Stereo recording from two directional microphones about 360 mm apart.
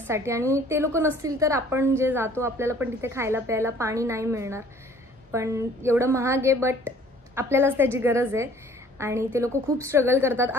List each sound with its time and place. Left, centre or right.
0.0 s a woman's voice: centre